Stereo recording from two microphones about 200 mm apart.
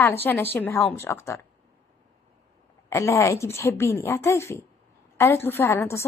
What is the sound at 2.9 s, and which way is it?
A woman's voice, 15° left (ahead or behind).